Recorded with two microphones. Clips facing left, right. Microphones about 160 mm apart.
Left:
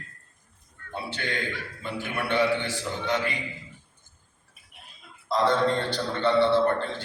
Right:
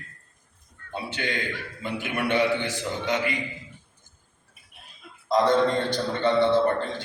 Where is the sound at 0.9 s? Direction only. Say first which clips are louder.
Right 2 dB; 15° right (ahead or behind).